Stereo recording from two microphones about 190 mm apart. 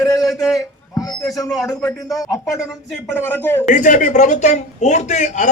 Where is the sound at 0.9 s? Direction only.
20° left (ahead or behind).